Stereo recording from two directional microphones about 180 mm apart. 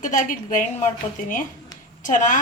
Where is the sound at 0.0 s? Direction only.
45° left (ahead or behind).